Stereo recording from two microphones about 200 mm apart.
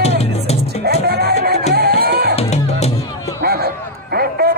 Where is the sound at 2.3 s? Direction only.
35° left (ahead or behind).